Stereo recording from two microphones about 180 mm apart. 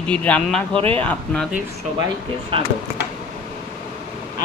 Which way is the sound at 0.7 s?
30° right (ahead or behind).